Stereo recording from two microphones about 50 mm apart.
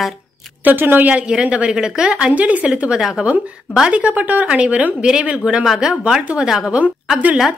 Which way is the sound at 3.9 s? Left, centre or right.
Right.